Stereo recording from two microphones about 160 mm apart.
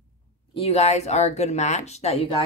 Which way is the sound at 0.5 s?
40° left (ahead or behind).